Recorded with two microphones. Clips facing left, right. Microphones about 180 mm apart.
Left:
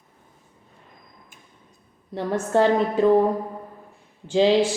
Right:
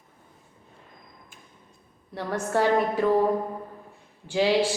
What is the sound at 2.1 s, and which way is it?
A woman's voice, 20° left (ahead or behind).